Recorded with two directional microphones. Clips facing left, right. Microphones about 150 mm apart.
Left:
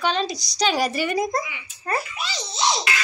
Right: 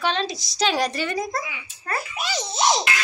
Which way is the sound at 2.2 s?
50° right (ahead or behind).